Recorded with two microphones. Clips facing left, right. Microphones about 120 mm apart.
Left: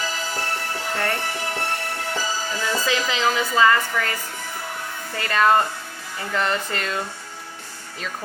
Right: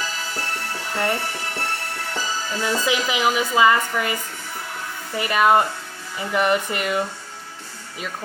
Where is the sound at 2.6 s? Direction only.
15° right (ahead or behind).